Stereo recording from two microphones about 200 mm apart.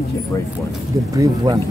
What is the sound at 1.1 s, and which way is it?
Speech, 20° right (ahead or behind).